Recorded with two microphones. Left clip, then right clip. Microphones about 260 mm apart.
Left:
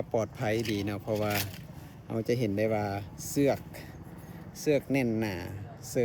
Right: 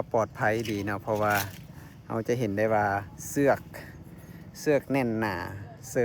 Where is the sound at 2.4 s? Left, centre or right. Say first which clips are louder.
Right 3 dB; centre.